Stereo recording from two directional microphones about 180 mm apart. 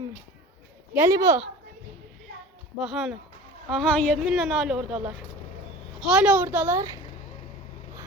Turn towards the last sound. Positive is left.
turn(degrees=-15)  # may be behind; listen again after turning